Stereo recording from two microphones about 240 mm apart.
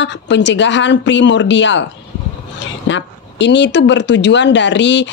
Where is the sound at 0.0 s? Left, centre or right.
Left.